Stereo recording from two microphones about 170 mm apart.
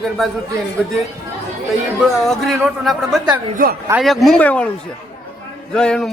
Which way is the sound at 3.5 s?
60° right (ahead or behind).